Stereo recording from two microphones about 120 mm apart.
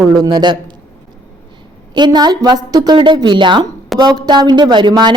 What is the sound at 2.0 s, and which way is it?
Speech, 35° right (ahead or behind).